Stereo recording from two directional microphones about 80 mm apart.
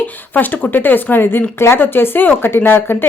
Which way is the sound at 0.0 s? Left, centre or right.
Left.